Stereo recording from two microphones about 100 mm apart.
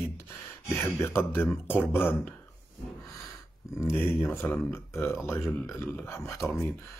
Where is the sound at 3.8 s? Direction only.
25° left (ahead or behind).